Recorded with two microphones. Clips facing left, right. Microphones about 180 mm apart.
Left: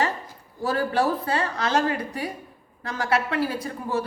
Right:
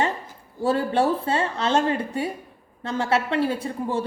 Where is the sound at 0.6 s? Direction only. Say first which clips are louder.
Right 2 dB; 25° right (ahead or behind).